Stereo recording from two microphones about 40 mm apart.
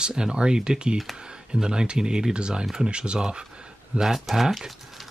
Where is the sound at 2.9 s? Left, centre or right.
Right.